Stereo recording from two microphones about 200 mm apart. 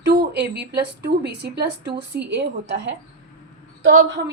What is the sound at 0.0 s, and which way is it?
A woman's voice, 55° right (ahead or behind).